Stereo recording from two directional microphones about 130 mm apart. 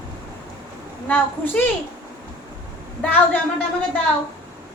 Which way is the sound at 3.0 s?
10° left (ahead or behind).